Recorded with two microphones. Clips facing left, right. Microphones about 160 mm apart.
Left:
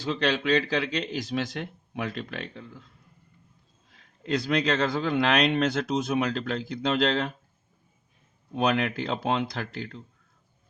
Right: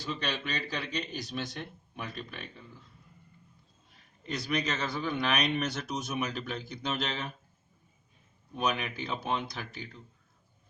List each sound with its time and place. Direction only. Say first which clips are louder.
0.0 s a man's voice: left 9 dB; 90° left
4.2 s a man's voice: left 7 dB; 90° left
8.5 s a man's voice: left 7 dB; 90° left